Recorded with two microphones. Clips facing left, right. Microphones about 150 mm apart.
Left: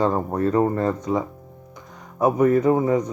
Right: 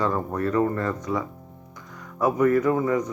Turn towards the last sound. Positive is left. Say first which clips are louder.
# left 3 dB
turn(degrees=25)  # may be behind; listen again after turning